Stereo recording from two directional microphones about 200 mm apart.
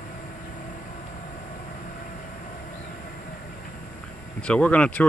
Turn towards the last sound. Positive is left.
turn(degrees=5)  # may be behind; listen again after turning